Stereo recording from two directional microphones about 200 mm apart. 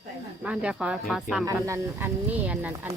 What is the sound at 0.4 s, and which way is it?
Speech, 5° right (ahead or behind).